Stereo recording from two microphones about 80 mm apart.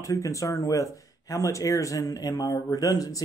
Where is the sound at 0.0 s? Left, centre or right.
Left.